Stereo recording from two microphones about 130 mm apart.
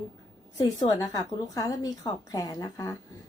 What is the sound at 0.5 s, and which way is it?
A woman's voice, 30° left (ahead or behind).